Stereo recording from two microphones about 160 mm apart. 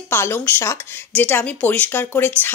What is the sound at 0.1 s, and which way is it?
A woman's voice, 15° left (ahead or behind).